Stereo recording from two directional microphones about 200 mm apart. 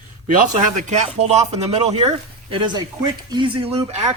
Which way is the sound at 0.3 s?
40° right (ahead or behind).